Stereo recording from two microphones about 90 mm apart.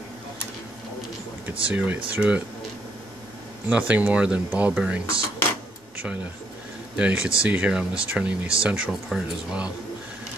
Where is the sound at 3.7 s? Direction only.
15° right (ahead or behind).